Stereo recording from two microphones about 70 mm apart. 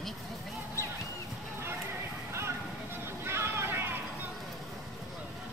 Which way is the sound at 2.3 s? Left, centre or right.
Right.